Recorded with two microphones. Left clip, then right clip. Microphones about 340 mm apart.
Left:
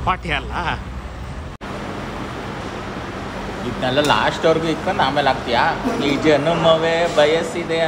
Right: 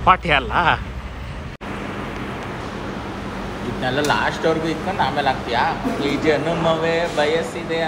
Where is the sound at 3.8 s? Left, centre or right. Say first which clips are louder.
Left 3 dB; left.